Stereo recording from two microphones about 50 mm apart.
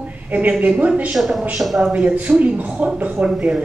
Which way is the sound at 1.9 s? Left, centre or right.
Right.